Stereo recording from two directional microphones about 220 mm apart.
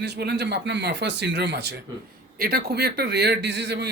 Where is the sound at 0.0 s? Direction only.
50° right (ahead or behind).